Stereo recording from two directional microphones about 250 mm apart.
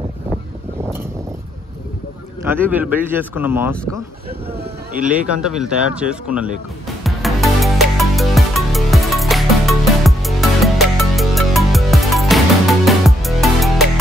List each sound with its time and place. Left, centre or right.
2.4 s speech: centre
4.6 s speech: right
5.3 s speech: centre
7.0 s music: centre